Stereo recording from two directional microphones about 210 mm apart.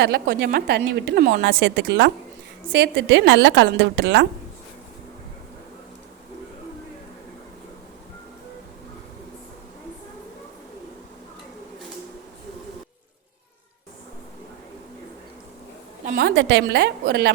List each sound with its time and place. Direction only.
0.0 s a woman's voice: 50° right (ahead or behind)
16.0 s a woman's voice: 50° right (ahead or behind)